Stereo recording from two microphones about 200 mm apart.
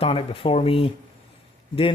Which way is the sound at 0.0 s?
30° left (ahead or behind).